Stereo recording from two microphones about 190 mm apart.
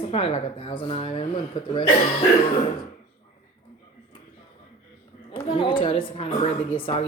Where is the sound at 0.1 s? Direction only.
30° left (ahead or behind).